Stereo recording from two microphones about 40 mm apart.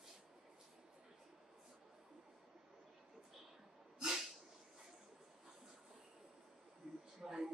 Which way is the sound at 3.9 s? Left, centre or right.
Centre.